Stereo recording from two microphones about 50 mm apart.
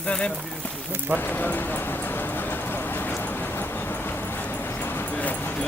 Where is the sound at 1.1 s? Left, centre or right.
Left.